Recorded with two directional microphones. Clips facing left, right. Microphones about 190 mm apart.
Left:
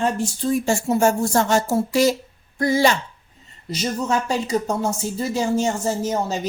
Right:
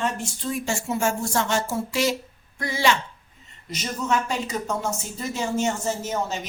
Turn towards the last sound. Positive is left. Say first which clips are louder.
# left 4 dB
turn(degrees=35)  # may be behind; listen again after turning